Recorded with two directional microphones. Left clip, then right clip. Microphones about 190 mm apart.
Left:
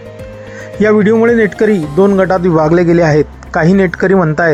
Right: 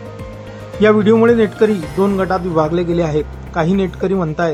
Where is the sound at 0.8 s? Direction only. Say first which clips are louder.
Left 2 dB; 25° left (ahead or behind).